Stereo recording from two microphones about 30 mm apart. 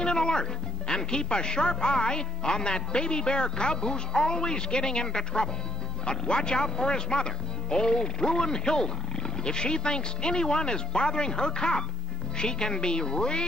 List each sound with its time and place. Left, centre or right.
0.0 s speech: left